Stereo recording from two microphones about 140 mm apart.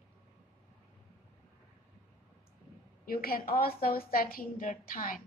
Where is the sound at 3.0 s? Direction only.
90° left.